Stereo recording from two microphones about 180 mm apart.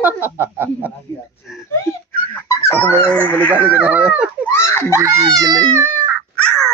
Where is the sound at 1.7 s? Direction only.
15° left (ahead or behind).